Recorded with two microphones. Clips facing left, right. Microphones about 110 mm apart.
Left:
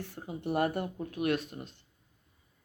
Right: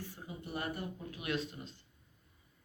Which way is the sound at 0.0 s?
70° left (ahead or behind).